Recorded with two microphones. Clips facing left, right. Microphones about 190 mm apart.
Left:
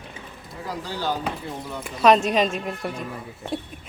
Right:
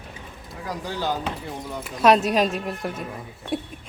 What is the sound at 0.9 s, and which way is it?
Speech, 20° right (ahead or behind).